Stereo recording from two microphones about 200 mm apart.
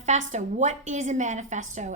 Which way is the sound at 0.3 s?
35° right (ahead or behind).